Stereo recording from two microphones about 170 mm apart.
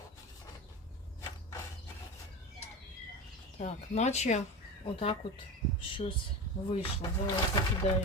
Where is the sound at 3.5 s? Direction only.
40° left (ahead or behind).